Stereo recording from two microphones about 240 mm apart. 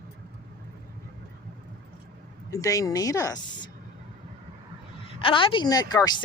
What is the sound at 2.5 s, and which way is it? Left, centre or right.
Speech, centre.